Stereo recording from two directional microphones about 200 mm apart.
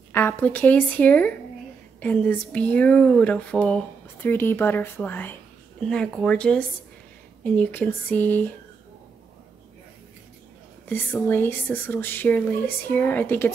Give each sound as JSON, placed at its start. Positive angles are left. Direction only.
{"t": 0.1, "sound": "speech", "side_deg": 10}
{"t": 10.9, "sound": "speech", "side_deg": 10}